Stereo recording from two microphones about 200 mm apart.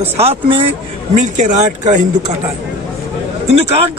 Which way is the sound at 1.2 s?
35° right (ahead or behind).